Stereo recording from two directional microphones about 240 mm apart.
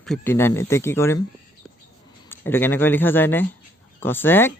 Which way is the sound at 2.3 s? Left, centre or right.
Centre.